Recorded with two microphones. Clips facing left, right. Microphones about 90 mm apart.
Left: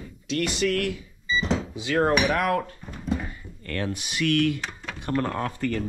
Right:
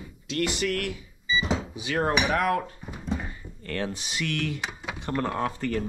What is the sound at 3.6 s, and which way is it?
Speech, 20° right (ahead or behind).